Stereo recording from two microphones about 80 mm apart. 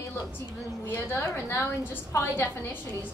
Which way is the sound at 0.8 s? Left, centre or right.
Left.